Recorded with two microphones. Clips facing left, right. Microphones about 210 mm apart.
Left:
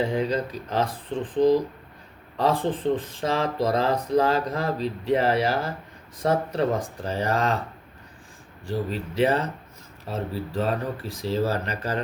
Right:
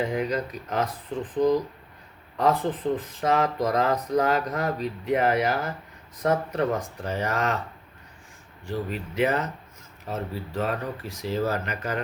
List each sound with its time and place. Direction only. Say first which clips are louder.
0.0 s speech: left 2 dB; 30° left (ahead or behind)
8.6 s speech: left 2 dB; 35° left (ahead or behind)